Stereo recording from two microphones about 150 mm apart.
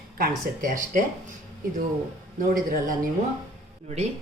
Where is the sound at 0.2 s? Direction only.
60° right (ahead or behind).